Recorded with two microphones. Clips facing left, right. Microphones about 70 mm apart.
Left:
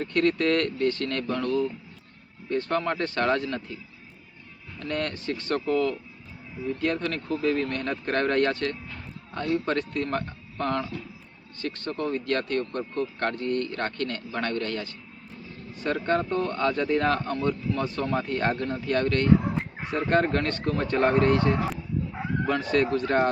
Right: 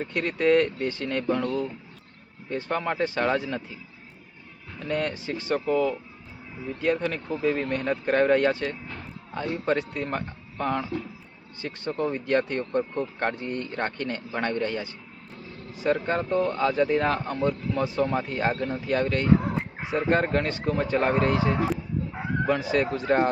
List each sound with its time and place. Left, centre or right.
0.0 s speech: centre
4.8 s speech: centre